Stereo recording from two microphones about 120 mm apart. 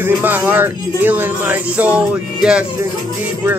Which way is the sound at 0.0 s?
15° right (ahead or behind).